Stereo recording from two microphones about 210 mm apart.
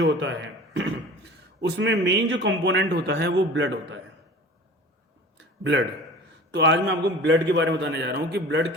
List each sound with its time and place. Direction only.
0.0 s a man's voice: 60° right (ahead or behind)
6.5 s a man's voice: 55° right (ahead or behind)